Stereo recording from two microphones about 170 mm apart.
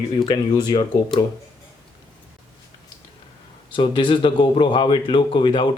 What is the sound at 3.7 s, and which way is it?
Speech, 30° left (ahead or behind).